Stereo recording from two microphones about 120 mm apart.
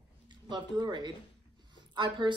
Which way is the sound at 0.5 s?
40° right (ahead or behind).